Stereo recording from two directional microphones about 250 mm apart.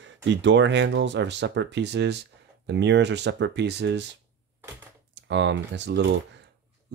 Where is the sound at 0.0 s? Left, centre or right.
Right.